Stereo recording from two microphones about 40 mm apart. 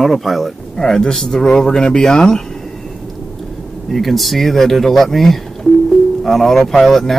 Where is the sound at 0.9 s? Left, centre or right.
Centre.